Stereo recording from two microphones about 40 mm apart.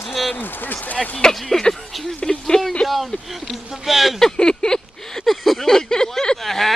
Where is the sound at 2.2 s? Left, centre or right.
Left.